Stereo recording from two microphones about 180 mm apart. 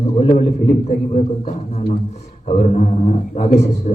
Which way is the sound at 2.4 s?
40° left (ahead or behind).